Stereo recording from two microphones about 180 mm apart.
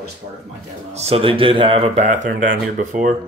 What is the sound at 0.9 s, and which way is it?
Speech, 35° right (ahead or behind).